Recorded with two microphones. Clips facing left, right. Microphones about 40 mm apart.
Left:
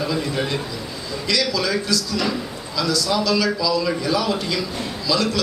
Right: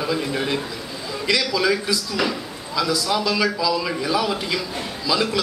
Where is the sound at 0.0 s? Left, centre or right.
Centre.